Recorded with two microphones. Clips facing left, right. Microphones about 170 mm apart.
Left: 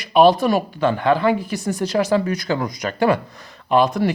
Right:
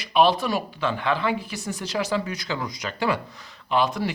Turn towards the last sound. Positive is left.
turn(degrees=50)  # may be behind; listen again after turning